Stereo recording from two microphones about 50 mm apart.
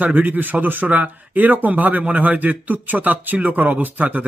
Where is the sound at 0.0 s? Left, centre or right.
Right.